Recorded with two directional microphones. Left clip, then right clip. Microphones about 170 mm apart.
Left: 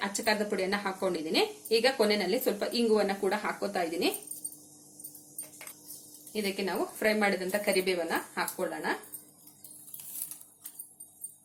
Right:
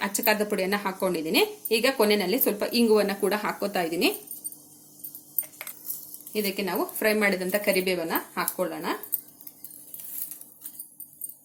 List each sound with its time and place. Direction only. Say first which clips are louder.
0.0 s a woman's voice: right 5 dB; 40° right (ahead or behind)
6.3 s a woman's voice: right 4 dB; 35° right (ahead or behind)